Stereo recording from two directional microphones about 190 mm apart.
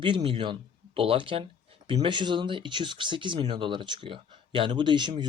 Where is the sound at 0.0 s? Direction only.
25° right (ahead or behind).